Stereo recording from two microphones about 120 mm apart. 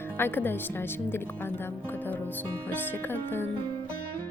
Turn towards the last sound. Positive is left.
turn(degrees=20)  # may be behind; listen again after turning